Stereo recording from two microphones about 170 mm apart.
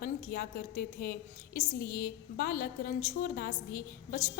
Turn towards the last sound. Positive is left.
turn(degrees=60)  # may be behind; listen again after turning